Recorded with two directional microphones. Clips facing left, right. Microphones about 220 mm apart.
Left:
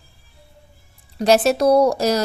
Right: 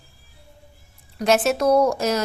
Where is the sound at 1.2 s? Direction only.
35° left (ahead or behind).